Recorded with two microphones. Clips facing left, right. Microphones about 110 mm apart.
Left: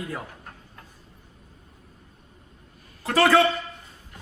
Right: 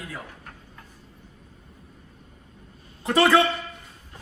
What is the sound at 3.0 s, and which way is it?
Speech, 20° right (ahead or behind).